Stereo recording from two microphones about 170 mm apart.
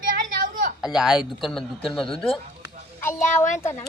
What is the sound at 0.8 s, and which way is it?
A man's voice, 5° right (ahead or behind).